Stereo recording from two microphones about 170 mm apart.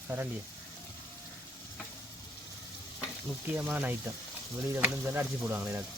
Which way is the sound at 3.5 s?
10° right (ahead or behind).